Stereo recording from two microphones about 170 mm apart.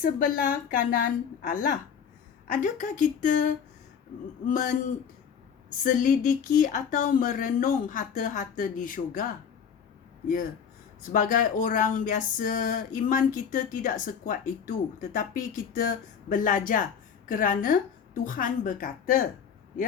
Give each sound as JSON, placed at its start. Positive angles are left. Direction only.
{"t": 0.0, "sound": "speech", "side_deg": 55}
{"t": 5.8, "sound": "speech", "side_deg": 50}
{"t": 11.1, "sound": "speech", "side_deg": 50}